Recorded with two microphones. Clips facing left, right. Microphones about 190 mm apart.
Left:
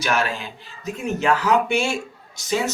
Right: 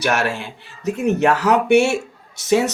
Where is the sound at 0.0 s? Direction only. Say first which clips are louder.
Right 3 dB; 70° right (ahead or behind).